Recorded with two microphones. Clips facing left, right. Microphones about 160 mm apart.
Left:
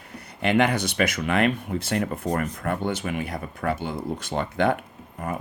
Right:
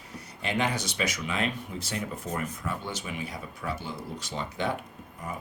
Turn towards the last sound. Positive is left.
turn(degrees=55)  # may be behind; listen again after turning